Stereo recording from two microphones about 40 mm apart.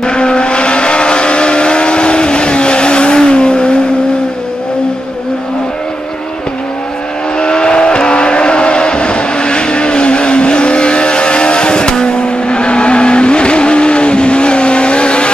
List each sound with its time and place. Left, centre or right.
0.0 s vehicle: left
7.3 s vehicle: left